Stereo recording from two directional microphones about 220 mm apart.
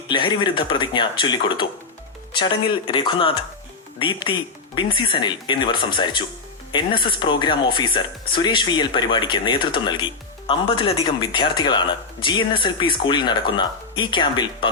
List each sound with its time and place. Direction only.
0.1 s speech: 20° left (ahead or behind)